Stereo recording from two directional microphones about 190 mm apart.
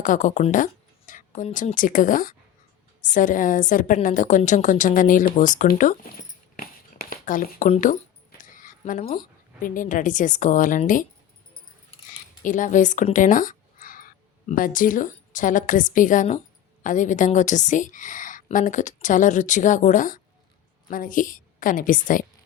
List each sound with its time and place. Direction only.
0.0 s a woman's voice: 45° left (ahead or behind)
6.6 s a sound: 50° left (ahead or behind)
8.4 s a woman's voice: 45° left (ahead or behind)
12.4 s a woman's voice: 45° left (ahead or behind)